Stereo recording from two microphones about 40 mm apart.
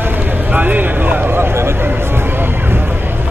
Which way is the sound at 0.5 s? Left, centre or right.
Right.